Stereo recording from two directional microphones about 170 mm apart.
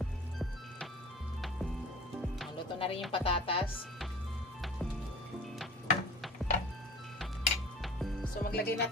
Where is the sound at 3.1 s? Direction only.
35° left (ahead or behind).